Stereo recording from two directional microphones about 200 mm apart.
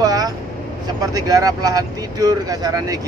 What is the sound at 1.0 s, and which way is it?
Speech, 20° right (ahead or behind).